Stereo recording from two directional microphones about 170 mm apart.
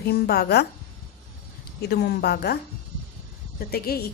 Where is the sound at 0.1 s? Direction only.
70° left (ahead or behind).